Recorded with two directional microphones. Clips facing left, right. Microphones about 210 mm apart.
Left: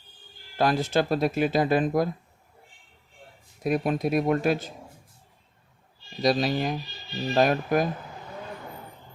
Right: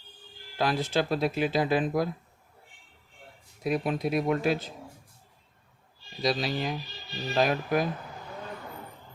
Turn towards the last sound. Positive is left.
turn(degrees=45)  # may be behind; listen again after turning